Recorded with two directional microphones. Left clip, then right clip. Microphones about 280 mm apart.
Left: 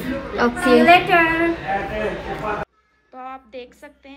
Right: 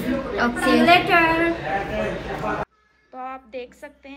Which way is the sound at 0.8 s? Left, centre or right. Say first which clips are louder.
Left 1 dB; centre.